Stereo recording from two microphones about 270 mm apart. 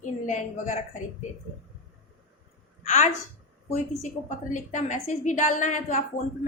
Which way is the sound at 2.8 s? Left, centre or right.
Left.